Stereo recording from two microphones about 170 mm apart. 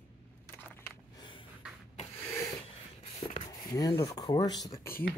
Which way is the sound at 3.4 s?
25° left (ahead or behind).